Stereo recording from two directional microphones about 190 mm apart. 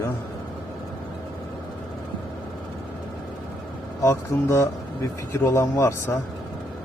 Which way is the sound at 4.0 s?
15° left (ahead or behind).